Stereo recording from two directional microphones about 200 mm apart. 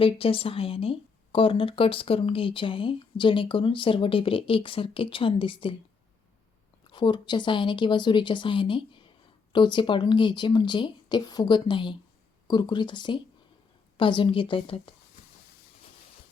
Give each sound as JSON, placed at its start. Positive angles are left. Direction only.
{"t": 0.0, "sound": "speech", "side_deg": 25}
{"t": 6.9, "sound": "speech", "side_deg": 25}